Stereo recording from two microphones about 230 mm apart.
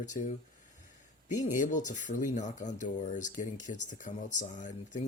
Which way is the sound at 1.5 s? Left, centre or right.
Left.